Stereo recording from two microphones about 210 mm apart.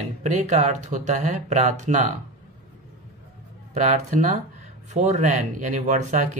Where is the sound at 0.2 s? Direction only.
35° right (ahead or behind).